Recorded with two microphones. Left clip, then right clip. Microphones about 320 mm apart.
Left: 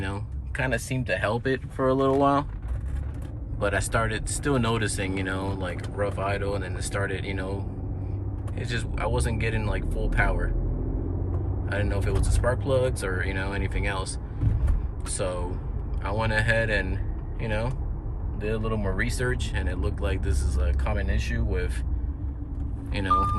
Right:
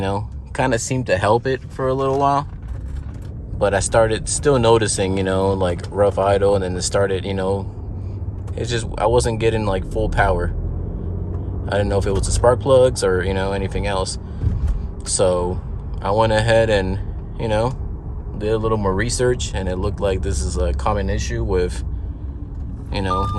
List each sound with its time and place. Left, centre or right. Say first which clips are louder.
0.0 s speech: right 11 dB; centre
1.4 s speech: right 5 dB; centre
3.6 s speech: right 10 dB; centre
11.6 s speech: right 11 dB; centre
16.9 s a sound: right 7 dB; centre
18.3 s speech: right 10 dB; centre
22.9 s speech: right 2 dB; centre